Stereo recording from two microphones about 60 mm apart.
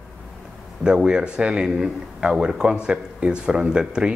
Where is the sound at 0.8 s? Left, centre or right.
Centre.